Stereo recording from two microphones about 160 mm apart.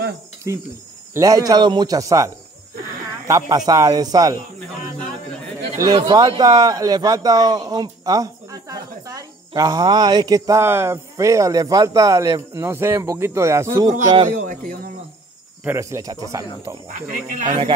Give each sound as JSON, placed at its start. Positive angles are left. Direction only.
{"t": 1.1, "sound": "speech", "side_deg": -20}
{"t": 5.8, "sound": "speech", "side_deg": -25}
{"t": 14.3, "sound": "speech", "side_deg": -60}
{"t": 15.6, "sound": "speech", "side_deg": -15}
{"t": 17.1, "sound": "speech", "side_deg": -55}